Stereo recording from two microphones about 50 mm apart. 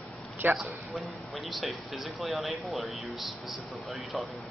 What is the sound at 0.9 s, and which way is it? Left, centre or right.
Speech, centre.